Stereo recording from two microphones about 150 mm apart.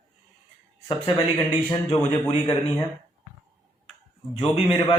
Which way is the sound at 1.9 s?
35° left (ahead or behind).